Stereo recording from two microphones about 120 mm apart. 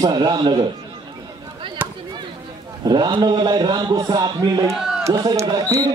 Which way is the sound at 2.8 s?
40° right (ahead or behind).